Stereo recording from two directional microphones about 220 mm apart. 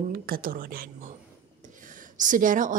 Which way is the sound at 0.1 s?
40° right (ahead or behind).